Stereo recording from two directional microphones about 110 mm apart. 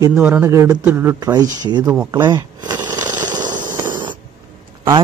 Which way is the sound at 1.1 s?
40° right (ahead or behind).